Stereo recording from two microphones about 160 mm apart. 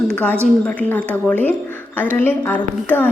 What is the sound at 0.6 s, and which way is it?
A woman's voice, 10° left (ahead or behind).